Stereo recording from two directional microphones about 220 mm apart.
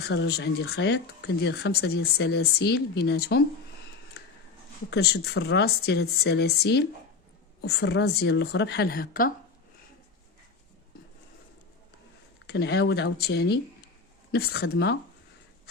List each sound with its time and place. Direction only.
0.1 s speech: 50° left (ahead or behind)
4.9 s speech: 45° left (ahead or behind)
12.5 s speech: 50° left (ahead or behind)